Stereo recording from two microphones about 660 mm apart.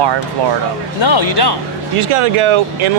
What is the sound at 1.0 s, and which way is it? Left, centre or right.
Speech, left.